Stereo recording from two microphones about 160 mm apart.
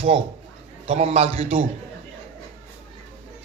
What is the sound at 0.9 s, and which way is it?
Chuckle, 45° right (ahead or behind).